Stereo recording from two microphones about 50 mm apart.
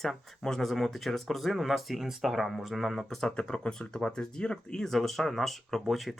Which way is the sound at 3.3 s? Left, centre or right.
Centre.